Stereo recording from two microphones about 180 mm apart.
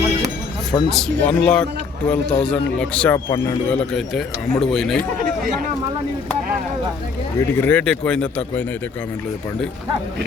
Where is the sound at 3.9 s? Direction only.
Centre (ahead or behind).